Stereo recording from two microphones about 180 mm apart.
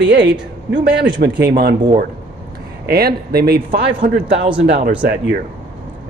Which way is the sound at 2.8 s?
60° right (ahead or behind).